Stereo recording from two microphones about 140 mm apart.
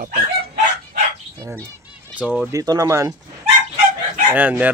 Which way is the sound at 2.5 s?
25° right (ahead or behind).